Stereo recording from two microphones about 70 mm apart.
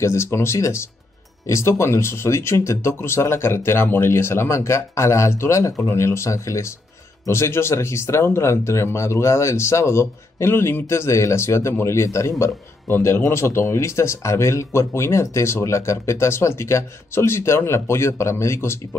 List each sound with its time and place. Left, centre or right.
0.0 s speech: left
12.8 s speech: left